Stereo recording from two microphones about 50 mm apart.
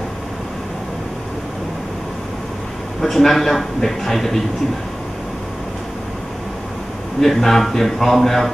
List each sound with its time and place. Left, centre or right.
3.0 s a man's voice: centre
7.2 s a man's voice: centre